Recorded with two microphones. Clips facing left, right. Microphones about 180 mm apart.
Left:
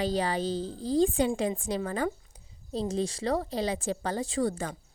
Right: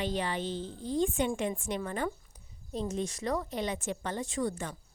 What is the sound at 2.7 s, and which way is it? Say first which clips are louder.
A woman's voice: left 4 dB; 35° left (ahead or behind).